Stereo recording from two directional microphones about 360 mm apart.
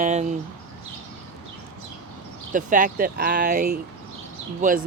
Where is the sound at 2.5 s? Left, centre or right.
Right.